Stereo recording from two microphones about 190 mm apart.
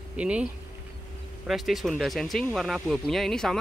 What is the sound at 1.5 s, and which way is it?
Speech, centre (ahead or behind).